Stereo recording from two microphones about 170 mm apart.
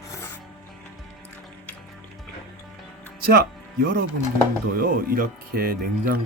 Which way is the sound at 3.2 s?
60° right (ahead or behind).